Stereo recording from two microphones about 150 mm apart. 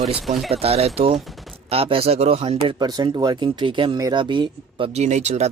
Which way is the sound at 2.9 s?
25° right (ahead or behind).